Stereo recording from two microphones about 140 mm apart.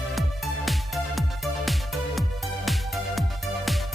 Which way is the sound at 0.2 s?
Centre (ahead or behind).